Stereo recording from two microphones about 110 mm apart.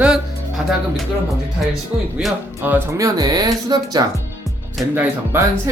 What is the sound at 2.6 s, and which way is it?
Speech, 15° right (ahead or behind).